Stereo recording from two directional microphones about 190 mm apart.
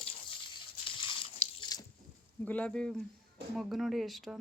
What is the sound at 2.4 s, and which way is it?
Speech, 5° left (ahead or behind).